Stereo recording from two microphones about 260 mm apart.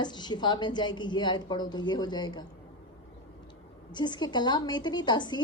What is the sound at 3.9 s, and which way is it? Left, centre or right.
A woman's voice, centre.